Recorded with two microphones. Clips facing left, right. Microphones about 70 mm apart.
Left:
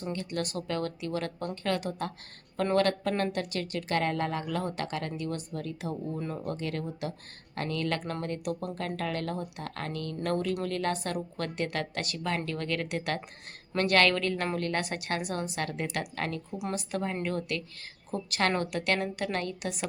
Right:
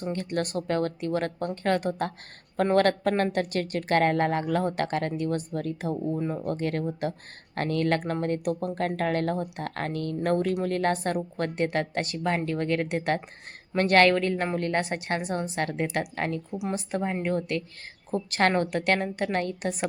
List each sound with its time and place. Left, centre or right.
0.1 s speech: right
6.1 s a woman's voice: right
6.4 s a woman's voice: right
16.5 s speech: centre
16.7 s a woman's voice: right